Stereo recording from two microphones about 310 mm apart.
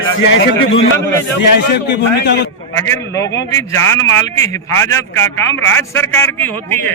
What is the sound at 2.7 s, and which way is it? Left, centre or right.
A man's voice, centre.